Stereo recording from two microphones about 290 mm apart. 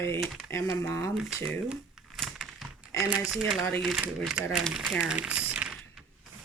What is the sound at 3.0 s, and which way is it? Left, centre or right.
Speech, centre.